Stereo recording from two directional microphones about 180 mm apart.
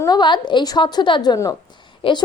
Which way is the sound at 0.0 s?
25° left (ahead or behind).